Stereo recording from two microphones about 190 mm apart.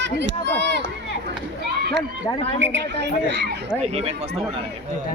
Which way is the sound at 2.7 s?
65° right (ahead or behind).